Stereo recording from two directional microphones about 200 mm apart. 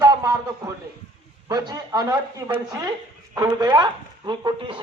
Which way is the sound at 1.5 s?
20° right (ahead or behind).